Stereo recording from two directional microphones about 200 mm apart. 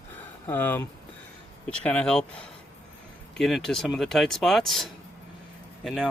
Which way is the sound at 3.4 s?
Centre (ahead or behind).